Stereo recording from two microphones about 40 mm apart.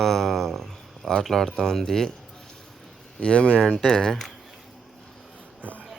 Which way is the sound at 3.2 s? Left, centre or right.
Left.